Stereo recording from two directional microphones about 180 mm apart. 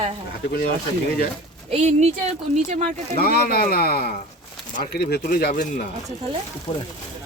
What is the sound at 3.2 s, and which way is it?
Speech, 60° left (ahead or behind).